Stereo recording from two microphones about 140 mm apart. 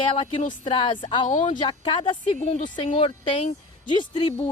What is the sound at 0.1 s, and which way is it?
Speech, 35° left (ahead or behind).